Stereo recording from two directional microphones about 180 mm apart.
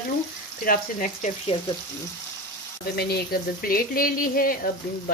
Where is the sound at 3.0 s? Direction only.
60° left (ahead or behind).